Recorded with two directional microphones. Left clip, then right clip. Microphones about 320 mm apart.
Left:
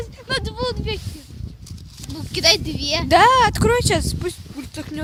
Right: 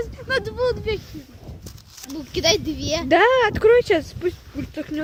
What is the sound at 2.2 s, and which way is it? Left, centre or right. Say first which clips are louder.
Speech: left 3 dB; left.